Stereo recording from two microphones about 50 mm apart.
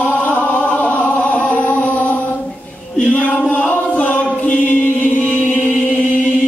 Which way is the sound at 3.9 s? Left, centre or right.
Left.